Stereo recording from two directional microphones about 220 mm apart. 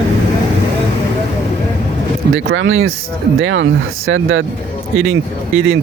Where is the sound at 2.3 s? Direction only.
65° right (ahead or behind).